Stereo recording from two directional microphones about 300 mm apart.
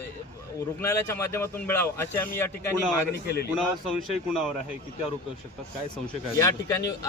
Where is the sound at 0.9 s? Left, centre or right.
Centre.